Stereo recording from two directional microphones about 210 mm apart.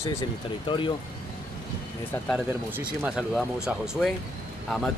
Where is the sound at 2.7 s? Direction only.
5° right (ahead or behind).